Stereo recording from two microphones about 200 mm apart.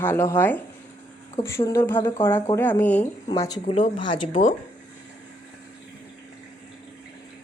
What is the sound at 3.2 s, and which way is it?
Speech, 20° left (ahead or behind).